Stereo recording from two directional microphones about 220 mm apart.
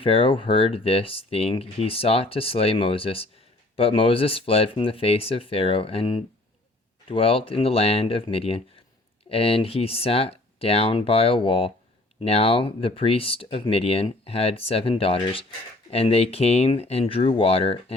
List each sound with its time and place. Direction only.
0.0 s speech: 25° left (ahead or behind)